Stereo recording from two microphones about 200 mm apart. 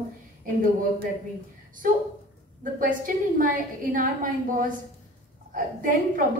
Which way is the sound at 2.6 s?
45° right (ahead or behind).